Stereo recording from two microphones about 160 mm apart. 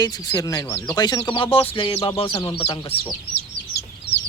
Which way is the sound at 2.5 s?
35° left (ahead or behind).